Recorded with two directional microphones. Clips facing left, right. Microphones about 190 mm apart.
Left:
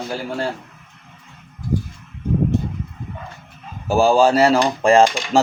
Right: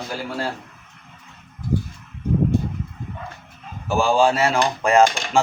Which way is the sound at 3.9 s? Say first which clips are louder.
Left 4 dB; 40° left (ahead or behind).